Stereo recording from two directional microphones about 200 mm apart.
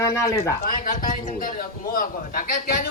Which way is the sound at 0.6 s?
45° left (ahead or behind).